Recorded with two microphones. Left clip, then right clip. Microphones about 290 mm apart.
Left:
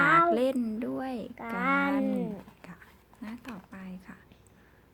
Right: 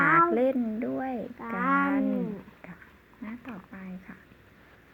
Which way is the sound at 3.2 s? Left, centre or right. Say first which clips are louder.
Right 1 dB; centre.